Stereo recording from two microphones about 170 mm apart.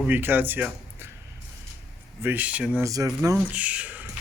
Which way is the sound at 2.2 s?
10° right (ahead or behind).